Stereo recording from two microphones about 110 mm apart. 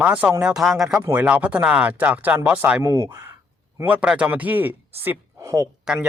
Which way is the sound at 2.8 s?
25° right (ahead or behind).